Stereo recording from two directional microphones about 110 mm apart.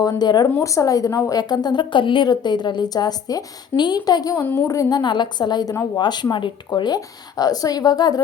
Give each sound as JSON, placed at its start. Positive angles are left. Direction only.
{"t": 0.0, "sound": "a woman's voice", "side_deg": 40}
{"t": 0.4, "sound": "a woman's voice", "side_deg": 25}